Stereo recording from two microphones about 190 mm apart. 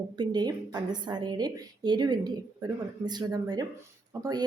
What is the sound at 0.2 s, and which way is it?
Speech, 20° right (ahead or behind).